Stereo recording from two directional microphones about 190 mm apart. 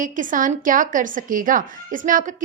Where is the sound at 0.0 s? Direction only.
45° right (ahead or behind).